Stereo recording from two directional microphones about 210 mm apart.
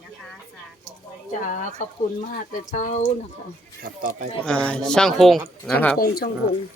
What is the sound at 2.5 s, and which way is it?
Speech, 35° left (ahead or behind).